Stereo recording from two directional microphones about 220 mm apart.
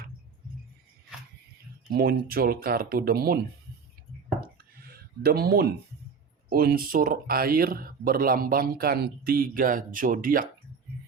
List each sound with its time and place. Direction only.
1.9 s speech: 45° right (ahead or behind)
4.9 s speech: 45° right (ahead or behind)